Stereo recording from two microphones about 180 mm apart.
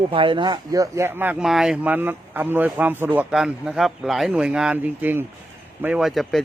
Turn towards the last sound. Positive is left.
turn(degrees=0)  # may be behind; listen again after turning